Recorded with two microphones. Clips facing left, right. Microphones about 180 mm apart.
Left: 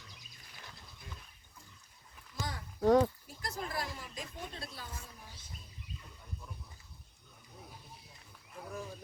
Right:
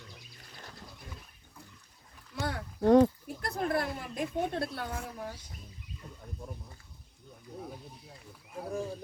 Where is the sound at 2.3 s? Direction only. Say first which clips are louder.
Right 7 dB; 65° right (ahead or behind).